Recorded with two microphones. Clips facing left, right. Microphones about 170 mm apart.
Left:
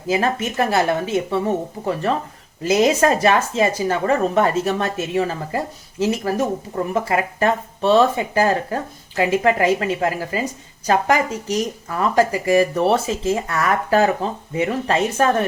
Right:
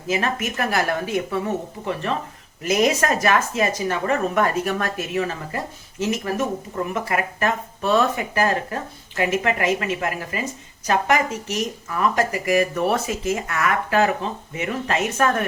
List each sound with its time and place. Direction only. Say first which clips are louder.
0.1 s speech: left 4 dB; 30° left (ahead or behind)
1.8 s speech: left 5 dB; 40° left (ahead or behind)
2.6 s speech: left 4 dB; 30° left (ahead or behind)